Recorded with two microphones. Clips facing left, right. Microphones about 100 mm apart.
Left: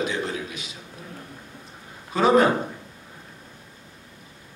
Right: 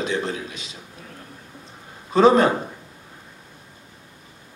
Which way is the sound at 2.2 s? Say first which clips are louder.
Right 3 dB; 30° right (ahead or behind).